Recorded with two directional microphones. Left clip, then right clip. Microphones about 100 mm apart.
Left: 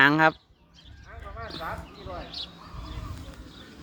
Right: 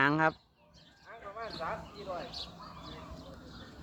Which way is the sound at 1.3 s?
10° left (ahead or behind).